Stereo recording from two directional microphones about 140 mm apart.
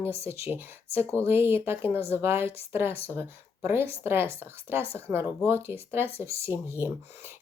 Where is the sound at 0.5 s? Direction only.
15° right (ahead or behind).